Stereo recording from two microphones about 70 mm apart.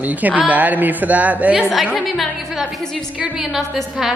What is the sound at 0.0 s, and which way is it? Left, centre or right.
A woman's voice, right.